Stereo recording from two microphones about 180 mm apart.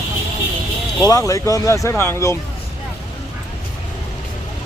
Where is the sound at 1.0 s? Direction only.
20° left (ahead or behind).